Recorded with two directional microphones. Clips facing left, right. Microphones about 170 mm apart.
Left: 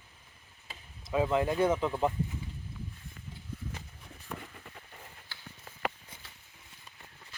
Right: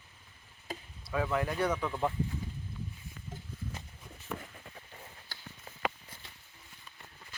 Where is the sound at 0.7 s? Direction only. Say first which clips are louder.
Right 9 dB; 40° right (ahead or behind).